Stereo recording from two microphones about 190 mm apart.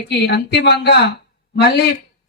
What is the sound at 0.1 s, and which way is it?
A woman's voice, 60° left (ahead or behind).